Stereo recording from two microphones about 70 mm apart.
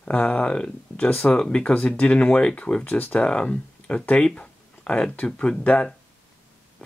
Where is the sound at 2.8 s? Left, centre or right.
Left.